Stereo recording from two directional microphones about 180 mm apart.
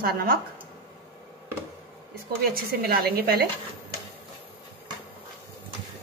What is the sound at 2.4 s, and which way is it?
A woman's voice, 60° right (ahead or behind).